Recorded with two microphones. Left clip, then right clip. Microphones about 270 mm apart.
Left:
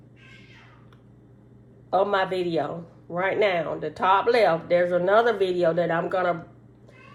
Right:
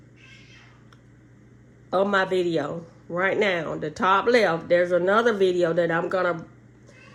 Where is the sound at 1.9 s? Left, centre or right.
Right.